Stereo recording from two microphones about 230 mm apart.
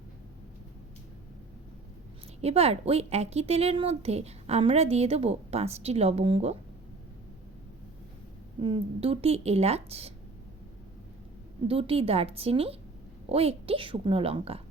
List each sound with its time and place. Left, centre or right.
2.4 s speech: right
8.6 s speech: right
11.7 s speech: right